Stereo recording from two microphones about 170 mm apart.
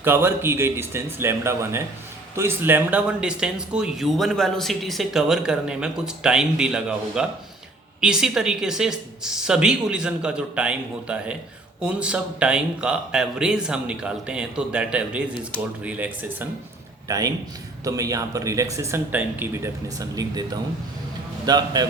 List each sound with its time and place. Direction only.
0.0 s speech: 15° right (ahead or behind)
17.1 s speech: 20° right (ahead or behind)